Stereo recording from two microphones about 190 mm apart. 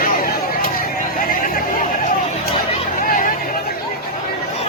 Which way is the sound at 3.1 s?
45° left (ahead or behind).